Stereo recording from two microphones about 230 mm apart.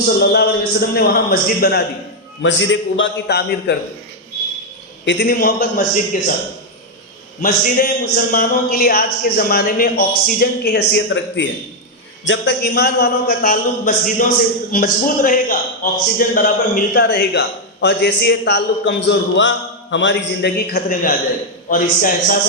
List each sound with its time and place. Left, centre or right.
0.2 s a man's voice: left
2.4 s a man's voice: left
5.0 s a man's voice: left
7.4 s a man's voice: left